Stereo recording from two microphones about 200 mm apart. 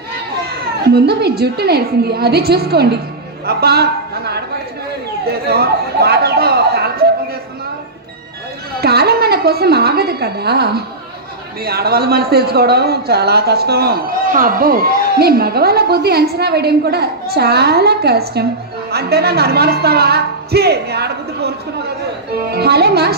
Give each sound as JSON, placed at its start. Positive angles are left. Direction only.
{"t": 0.9, "sound": "a man's voice", "side_deg": -55}
{"t": 8.8, "sound": "a sound", "side_deg": -55}
{"t": 11.6, "sound": "speech", "side_deg": -50}